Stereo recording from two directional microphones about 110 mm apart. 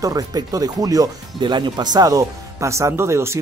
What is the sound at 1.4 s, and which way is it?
Speech, 45° right (ahead or behind).